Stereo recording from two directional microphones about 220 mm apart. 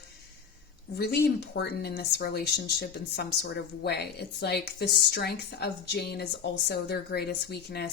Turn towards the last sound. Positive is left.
turn(degrees=45)  # may be behind; listen again after turning